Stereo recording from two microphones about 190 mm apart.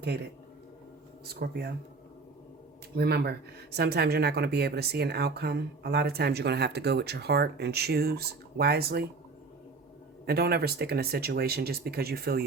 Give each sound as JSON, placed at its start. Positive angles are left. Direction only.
{"t": 1.3, "sound": "speech", "side_deg": -55}
{"t": 2.9, "sound": "speech", "side_deg": -60}
{"t": 10.2, "sound": "speech", "side_deg": -55}